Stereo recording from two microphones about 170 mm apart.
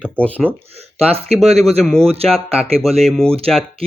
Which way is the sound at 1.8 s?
5° left (ahead or behind).